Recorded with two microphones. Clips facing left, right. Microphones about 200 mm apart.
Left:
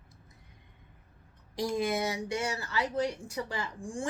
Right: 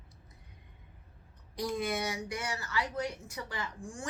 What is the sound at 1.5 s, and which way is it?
Speech, 25° left (ahead or behind).